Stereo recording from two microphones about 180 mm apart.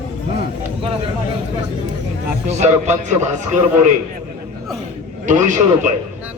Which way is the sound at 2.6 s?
40° right (ahead or behind).